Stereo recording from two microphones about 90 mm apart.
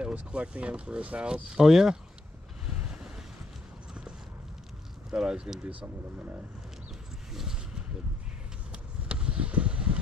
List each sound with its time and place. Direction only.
0.0 s speech: 10° right (ahead or behind)
2.6 s wind noise: 10° right (ahead or behind)
5.1 s speech: 10° right (ahead or behind)
7.3 s a sound: 5° right (ahead or behind)
9.1 s vehicle: 10° right (ahead or behind)